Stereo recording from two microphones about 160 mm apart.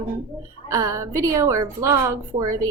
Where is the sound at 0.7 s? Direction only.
20° right (ahead or behind).